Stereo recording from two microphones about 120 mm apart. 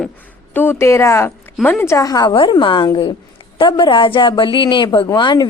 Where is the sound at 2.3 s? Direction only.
45° left (ahead or behind).